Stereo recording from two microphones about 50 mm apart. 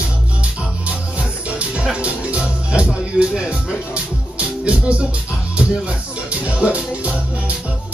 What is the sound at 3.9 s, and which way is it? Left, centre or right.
Music, right.